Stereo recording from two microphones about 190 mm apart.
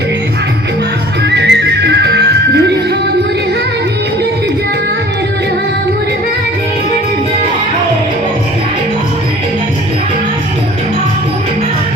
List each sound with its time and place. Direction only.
1.4 s music: 65° right (ahead or behind)